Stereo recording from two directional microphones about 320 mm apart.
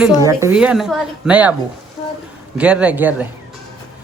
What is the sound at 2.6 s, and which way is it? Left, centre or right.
Speech, centre.